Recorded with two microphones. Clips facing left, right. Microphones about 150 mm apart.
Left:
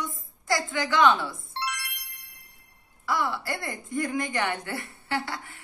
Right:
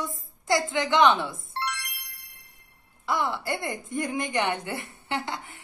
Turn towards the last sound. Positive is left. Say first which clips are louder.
# even
turn(degrees=-20)  # may be behind; listen again after turning